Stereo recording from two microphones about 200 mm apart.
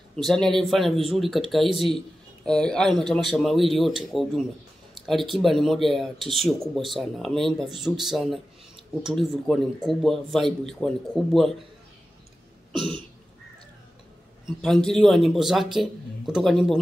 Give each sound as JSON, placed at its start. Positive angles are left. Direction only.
{"t": 0.1, "sound": "a man's voice", "side_deg": 5}
{"t": 14.4, "sound": "a man's voice", "side_deg": 5}